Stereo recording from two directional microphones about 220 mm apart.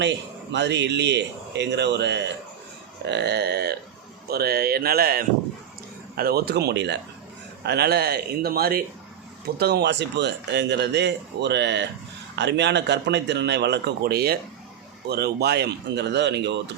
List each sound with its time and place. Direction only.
0.5 s a man's voice: 50° right (ahead or behind)